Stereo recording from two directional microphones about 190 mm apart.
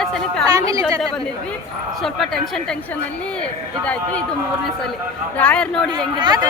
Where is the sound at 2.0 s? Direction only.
Centre (ahead or behind).